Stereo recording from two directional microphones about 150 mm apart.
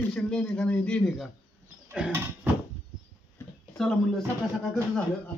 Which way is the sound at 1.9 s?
10° right (ahead or behind).